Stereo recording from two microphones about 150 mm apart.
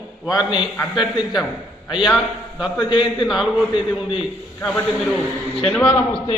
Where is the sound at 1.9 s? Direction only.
5° right (ahead or behind).